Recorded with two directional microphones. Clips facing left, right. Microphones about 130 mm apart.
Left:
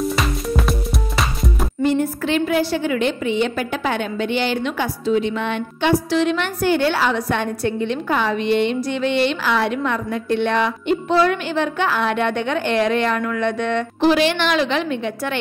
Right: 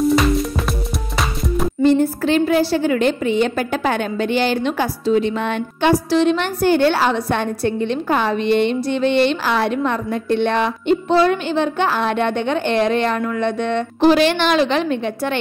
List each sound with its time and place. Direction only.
0.0 s music: centre (ahead or behind)
1.8 s a woman's voice: 30° right (ahead or behind)
14.0 s a woman's voice: 40° right (ahead or behind)